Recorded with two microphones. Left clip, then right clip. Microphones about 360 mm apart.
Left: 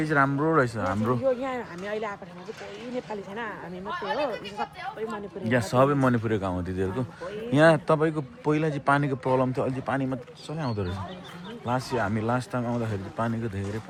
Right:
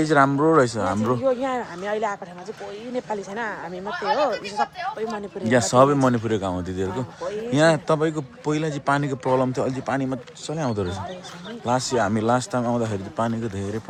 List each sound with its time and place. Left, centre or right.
0.0 s speech: centre
1.2 s speech: right
3.3 s speech: centre